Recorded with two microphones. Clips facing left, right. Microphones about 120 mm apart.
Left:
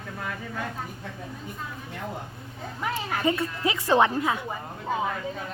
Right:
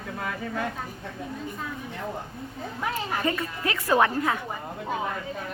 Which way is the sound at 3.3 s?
15° left (ahead or behind).